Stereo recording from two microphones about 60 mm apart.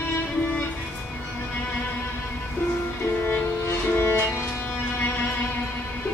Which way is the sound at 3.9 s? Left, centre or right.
Left.